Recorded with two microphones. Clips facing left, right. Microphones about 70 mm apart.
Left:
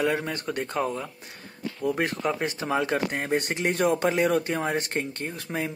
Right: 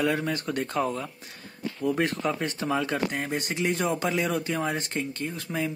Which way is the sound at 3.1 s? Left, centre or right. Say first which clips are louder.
Left 3 dB; left.